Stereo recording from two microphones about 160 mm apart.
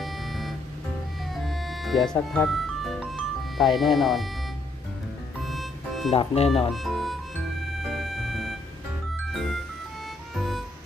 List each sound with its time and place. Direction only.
0.0 s music: centre (ahead or behind)
5.4 s music: centre (ahead or behind)
6.1 s speech: 40° left (ahead or behind)
6.7 s music: centre (ahead or behind)